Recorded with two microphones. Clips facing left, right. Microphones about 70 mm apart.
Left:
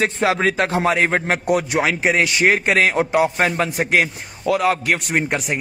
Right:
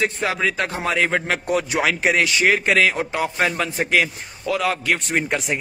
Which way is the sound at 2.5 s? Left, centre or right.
Left.